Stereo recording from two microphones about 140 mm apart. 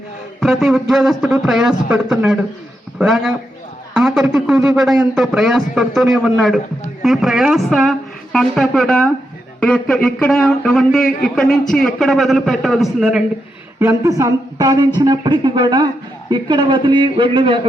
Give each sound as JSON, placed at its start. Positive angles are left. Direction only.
{"t": 0.3, "sound": "a man's voice", "side_deg": 0}
{"t": 13.7, "sound": "a man's voice", "side_deg": -20}